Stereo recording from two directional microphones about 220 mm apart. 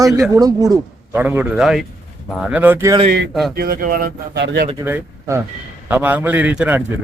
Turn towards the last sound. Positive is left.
turn(degrees=-5)  # may be behind; listen again after turning